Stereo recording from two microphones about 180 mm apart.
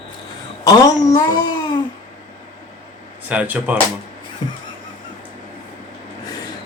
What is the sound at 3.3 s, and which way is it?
Speech, 10° right (ahead or behind).